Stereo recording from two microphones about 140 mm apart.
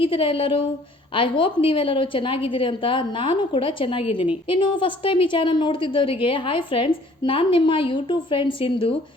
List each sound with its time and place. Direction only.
0.0 s a woman's voice: 40° left (ahead or behind)